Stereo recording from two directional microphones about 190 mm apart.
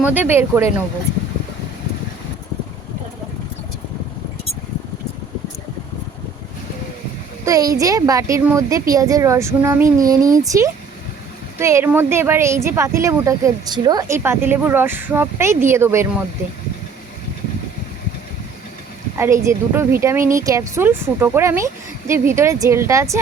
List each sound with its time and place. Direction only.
0.0 s speech: 10° right (ahead or behind)
7.4 s speech: 20° right (ahead or behind)
19.1 s speech: 15° right (ahead or behind)